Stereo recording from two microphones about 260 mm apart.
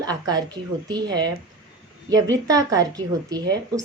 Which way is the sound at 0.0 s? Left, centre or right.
Centre.